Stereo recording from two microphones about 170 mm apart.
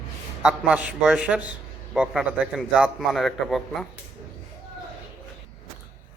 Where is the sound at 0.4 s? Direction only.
10° right (ahead or behind).